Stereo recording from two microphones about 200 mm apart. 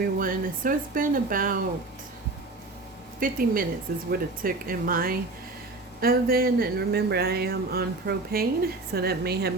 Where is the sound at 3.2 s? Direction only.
45° right (ahead or behind).